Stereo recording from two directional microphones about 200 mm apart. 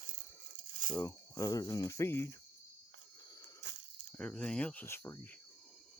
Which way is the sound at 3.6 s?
60° right (ahead or behind).